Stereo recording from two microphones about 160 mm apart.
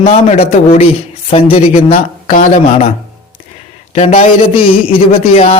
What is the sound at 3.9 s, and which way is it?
Speech, 40° left (ahead or behind).